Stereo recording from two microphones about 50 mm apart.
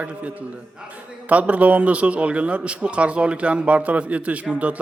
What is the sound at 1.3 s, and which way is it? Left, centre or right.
A man's voice, right.